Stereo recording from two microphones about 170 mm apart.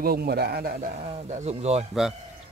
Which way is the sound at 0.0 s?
65° right (ahead or behind).